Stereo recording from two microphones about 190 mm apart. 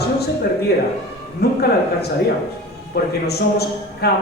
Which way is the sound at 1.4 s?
55° left (ahead or behind).